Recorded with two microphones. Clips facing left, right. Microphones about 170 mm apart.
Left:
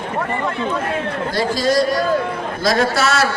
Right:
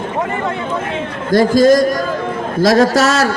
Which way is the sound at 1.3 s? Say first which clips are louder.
Right 10 dB; 50° right (ahead or behind).